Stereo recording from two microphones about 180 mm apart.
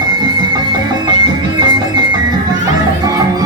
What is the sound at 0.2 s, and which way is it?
Music, 25° right (ahead or behind).